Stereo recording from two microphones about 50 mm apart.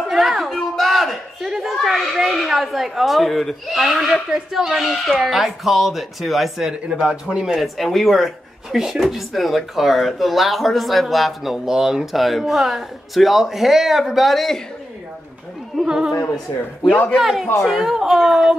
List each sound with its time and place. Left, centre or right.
0.1 s a sound: centre
1.5 s a woman's voice: centre
7.4 s a woman's voice: centre
15.7 s speech: centre
16.9 s a man's voice: left
17.2 s a woman's voice: centre